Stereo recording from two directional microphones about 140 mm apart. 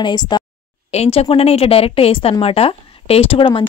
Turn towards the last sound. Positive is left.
turn(degrees=40)  # may be behind; listen again after turning